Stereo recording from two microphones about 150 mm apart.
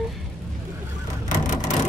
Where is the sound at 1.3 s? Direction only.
55° left (ahead or behind).